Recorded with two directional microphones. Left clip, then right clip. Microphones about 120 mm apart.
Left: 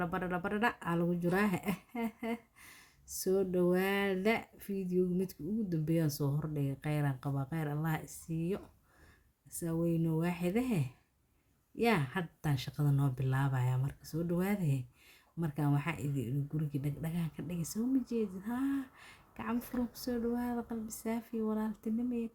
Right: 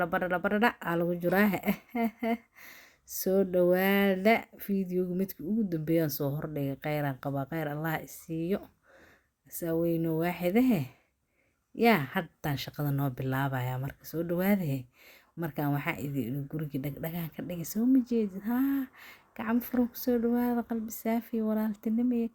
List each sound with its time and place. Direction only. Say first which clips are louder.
0.0 s speech: right 7 dB; 40° right (ahead or behind)